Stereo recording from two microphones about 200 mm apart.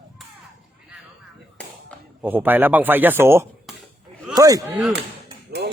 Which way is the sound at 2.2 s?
10° right (ahead or behind).